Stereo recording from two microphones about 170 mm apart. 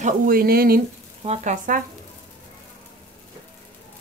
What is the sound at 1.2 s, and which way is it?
Speech, 40° right (ahead or behind).